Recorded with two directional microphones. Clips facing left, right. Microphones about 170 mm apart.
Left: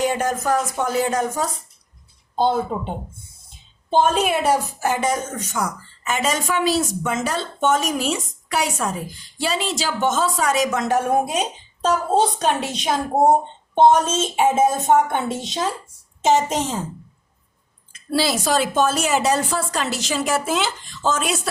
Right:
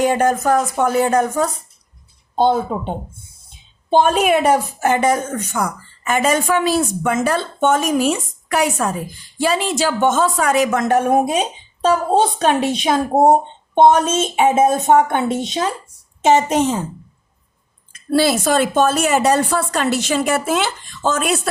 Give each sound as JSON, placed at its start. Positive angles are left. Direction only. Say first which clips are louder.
{"t": 0.0, "sound": "a woman's voice", "louder": "right 5 dB", "side_deg": -55}
{"t": 16.2, "sound": "a woman's voice", "louder": "right 4 dB", "side_deg": -60}
{"t": 17.9, "sound": "a woman's voice", "louder": "right 5 dB", "side_deg": -50}